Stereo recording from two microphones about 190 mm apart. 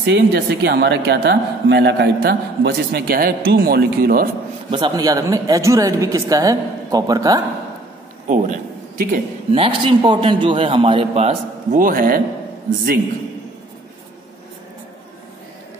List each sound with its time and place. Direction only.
0.0 s speech: 65° right (ahead or behind)
4.6 s speech: 25° right (ahead or behind)
8.3 s a man's voice: 45° right (ahead or behind)
9.5 s speech: 30° right (ahead or behind)
11.8 s a man's voice: 45° right (ahead or behind)